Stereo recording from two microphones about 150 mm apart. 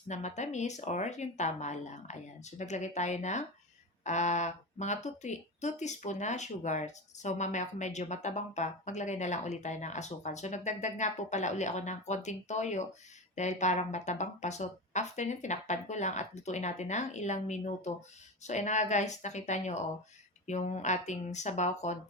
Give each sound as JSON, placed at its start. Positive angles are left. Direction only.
{"t": 0.1, "sound": "speech", "side_deg": 50}